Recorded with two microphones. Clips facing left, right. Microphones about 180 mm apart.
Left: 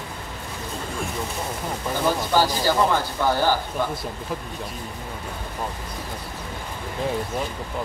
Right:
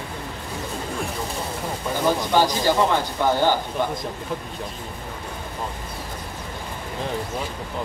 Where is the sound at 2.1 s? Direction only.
15° right (ahead or behind).